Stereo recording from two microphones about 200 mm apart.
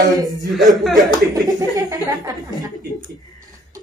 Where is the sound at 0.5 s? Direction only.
Centre (ahead or behind).